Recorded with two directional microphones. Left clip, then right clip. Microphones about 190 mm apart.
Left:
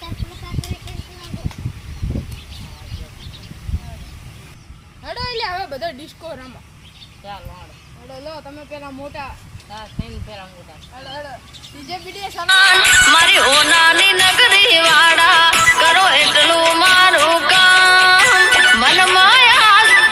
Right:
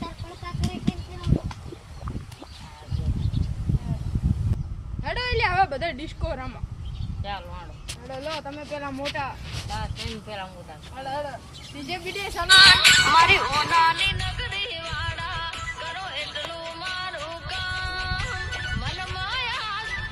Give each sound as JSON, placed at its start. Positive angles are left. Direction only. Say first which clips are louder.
{"t": 5.0, "sound": "a sound", "louder": "left 1 dB", "side_deg": -30}
{"t": 8.4, "sound": "speech", "louder": "even", "side_deg": 0}
{"t": 12.5, "sound": "music", "louder": "left 3 dB", "side_deg": 45}